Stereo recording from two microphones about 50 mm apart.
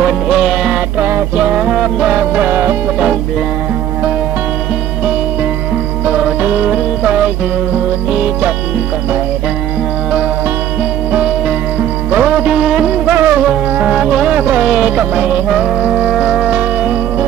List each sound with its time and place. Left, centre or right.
0.0 s music: centre
0.9 s music: right
1.4 s music: right
6.4 s music: right
12.2 s music: right
13.1 s music: right
13.7 s music: centre
14.3 s music: right
14.6 s music: centre
16.1 s music: centre